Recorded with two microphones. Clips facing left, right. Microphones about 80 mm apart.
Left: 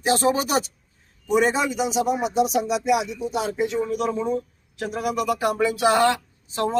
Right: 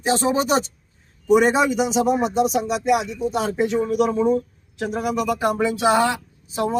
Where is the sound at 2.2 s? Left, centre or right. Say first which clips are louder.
Right 1 dB; centre.